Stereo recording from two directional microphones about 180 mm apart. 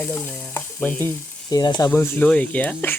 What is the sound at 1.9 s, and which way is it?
Frying, 10° left (ahead or behind).